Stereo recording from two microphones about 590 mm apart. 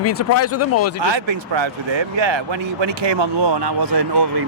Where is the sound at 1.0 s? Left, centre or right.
Right.